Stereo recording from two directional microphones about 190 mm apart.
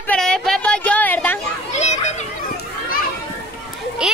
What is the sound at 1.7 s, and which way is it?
Children playing, 35° left (ahead or behind).